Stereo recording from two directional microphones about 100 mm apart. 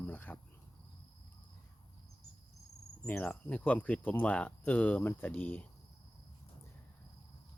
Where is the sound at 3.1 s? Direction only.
15° left (ahead or behind).